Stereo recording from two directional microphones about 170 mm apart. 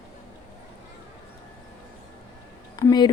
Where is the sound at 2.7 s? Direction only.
25° left (ahead or behind).